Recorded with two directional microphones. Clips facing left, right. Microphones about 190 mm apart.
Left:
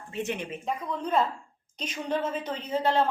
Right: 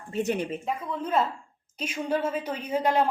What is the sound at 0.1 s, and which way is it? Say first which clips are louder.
Speech: right 5 dB; 40° right (ahead or behind).